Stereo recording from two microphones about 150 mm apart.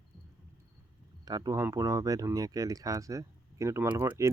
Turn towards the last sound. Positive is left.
turn(degrees=-20)  # may be behind; listen again after turning